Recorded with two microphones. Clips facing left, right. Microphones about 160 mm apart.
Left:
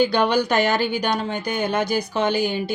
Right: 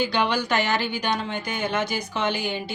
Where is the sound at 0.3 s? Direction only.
40° left (ahead or behind).